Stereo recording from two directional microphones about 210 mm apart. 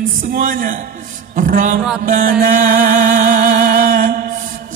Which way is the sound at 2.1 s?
40° right (ahead or behind).